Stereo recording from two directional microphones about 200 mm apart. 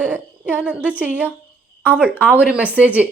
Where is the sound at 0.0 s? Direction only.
10° right (ahead or behind).